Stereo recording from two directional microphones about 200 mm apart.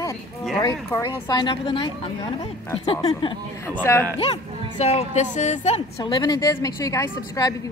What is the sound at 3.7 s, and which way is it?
Speech, 10° left (ahead or behind).